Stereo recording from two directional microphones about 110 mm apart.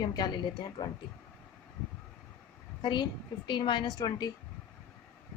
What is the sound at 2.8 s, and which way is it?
A woman's voice, 45° left (ahead or behind).